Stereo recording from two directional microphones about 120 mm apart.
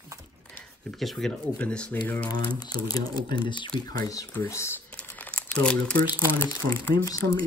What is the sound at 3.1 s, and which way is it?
Speech, 45° right (ahead or behind).